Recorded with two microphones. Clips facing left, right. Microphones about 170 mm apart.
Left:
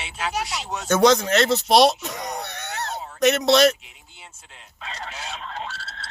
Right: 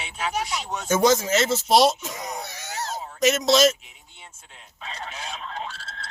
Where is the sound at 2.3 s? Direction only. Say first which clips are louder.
Left 3 dB; 65° left (ahead or behind).